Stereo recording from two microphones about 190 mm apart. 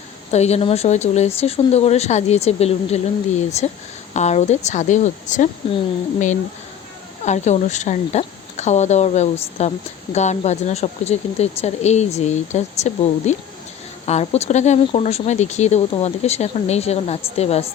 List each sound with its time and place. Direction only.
0.3 s speech: 35° left (ahead or behind)